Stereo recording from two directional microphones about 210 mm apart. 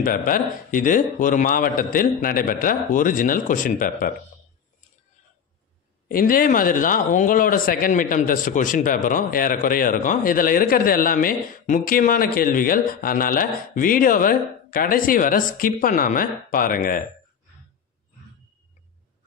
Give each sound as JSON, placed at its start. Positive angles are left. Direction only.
{"t": 0.0, "sound": "speech", "side_deg": 40}
{"t": 6.0, "sound": "speech", "side_deg": 40}